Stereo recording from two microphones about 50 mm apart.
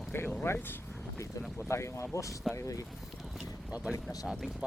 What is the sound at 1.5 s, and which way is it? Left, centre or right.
Speech, left.